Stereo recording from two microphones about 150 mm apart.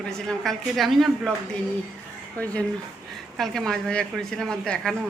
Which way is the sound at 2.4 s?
10° left (ahead or behind).